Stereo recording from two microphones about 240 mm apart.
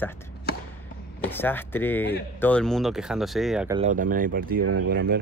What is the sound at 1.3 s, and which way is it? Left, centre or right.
Speech, centre.